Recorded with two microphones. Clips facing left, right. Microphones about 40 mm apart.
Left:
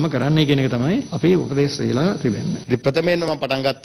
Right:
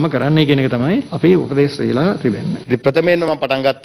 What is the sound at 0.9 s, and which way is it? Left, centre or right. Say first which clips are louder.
A man's voice: right 5 dB; centre.